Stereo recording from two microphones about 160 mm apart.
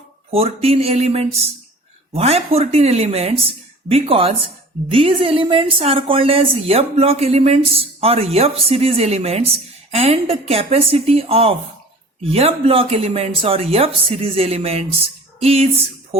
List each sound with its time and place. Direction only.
0.3 s a woman's voice: 40° right (ahead or behind)